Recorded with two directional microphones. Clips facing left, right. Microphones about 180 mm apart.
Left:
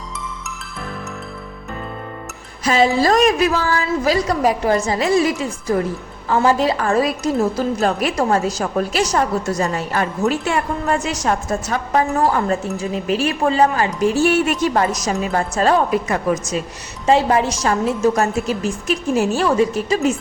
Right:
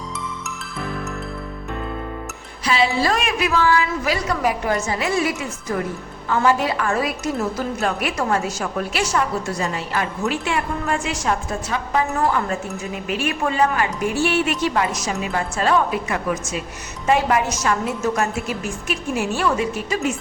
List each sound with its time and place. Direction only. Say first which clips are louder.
2.6 s a woman's voice: left 4 dB; 45° left (ahead or behind)
14.2 s a woman's voice: left 2 dB; 45° left (ahead or behind)